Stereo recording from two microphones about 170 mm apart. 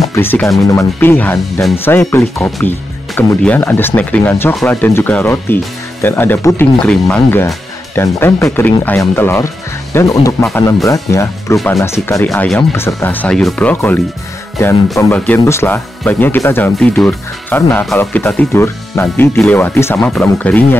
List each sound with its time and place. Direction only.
0.1 s speech: 10° left (ahead or behind)
11.5 s speech: centre (ahead or behind)
11.8 s speech: 15° left (ahead or behind)